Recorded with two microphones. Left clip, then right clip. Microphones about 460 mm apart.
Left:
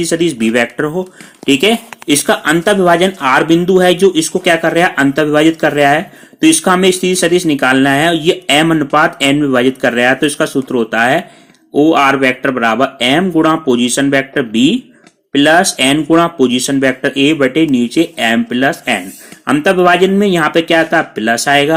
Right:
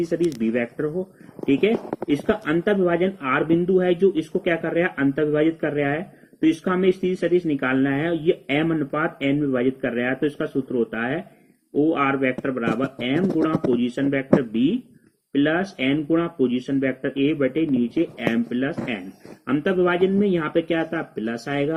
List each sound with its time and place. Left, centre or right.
0.1 s speech: left
2.0 s speech: left